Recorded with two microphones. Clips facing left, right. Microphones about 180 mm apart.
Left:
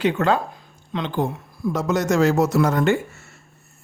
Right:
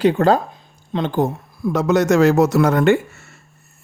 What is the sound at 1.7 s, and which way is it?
A man's voice, 70° right (ahead or behind).